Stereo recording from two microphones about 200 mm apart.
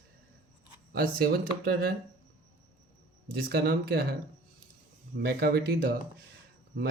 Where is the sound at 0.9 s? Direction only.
50° right (ahead or behind).